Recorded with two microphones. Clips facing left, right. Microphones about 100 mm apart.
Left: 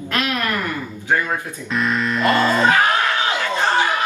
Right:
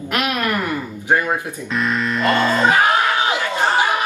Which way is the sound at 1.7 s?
Centre (ahead or behind).